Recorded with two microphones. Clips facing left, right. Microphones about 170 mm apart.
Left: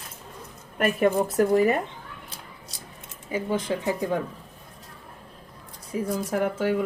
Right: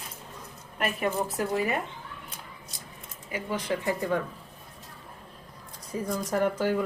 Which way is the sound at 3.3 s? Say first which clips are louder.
Left 4 dB; 25° left (ahead or behind).